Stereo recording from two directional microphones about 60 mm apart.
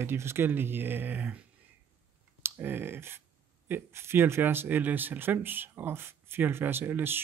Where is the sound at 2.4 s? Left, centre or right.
Right.